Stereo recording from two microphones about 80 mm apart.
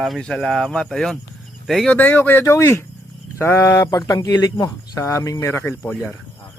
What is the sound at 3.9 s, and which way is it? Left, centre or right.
Speech, left.